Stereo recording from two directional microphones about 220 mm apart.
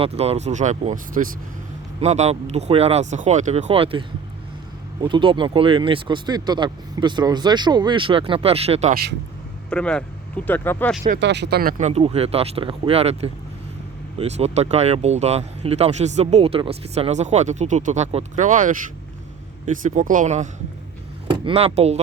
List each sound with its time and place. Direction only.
0.0 s speech: 30° right (ahead or behind)
5.0 s speech: 20° right (ahead or behind)
9.6 s speech: 5° left (ahead or behind)
11.2 s speech: 50° right (ahead or behind)
11.8 s speech: 30° right (ahead or behind)
19.8 s speech: 35° right (ahead or behind)